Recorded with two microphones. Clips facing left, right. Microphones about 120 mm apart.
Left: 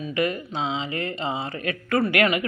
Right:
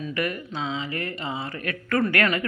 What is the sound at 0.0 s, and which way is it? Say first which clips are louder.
Speech: left 3 dB; 20° left (ahead or behind).